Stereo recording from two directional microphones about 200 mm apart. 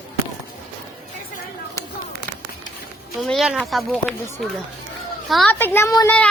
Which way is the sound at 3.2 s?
Centre (ahead or behind).